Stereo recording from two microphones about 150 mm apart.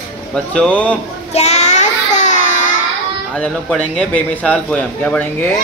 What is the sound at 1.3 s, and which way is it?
Child singing, 50° left (ahead or behind).